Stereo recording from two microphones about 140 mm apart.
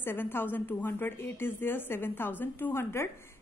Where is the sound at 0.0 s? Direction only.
15° left (ahead or behind).